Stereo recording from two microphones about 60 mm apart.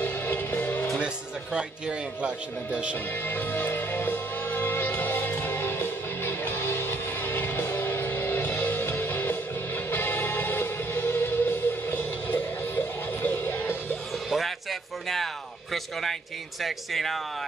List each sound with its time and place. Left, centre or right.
0.0 s music: left
0.9 s a man's voice: centre
3.2 s music: left
14.3 s music: centre
15.7 s speech: centre